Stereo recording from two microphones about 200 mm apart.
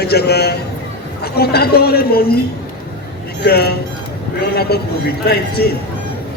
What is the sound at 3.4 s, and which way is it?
A man's voice, 55° left (ahead or behind).